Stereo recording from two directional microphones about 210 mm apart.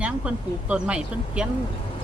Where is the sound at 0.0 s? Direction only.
5° right (ahead or behind).